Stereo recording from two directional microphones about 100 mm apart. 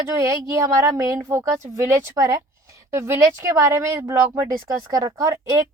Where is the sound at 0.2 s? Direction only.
30° right (ahead or behind).